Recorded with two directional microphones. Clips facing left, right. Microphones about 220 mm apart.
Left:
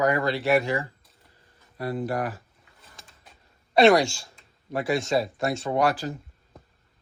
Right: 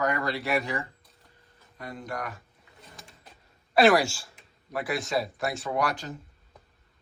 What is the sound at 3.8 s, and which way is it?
Speech, 5° right (ahead or behind).